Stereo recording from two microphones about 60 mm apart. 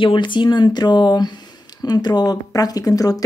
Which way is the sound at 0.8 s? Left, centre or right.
Left.